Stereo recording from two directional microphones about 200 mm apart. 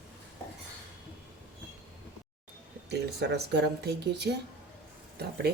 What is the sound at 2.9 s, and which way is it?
Speech, 55° right (ahead or behind).